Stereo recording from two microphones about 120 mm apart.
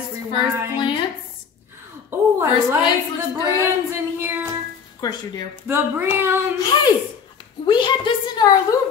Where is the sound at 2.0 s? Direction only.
20° right (ahead or behind).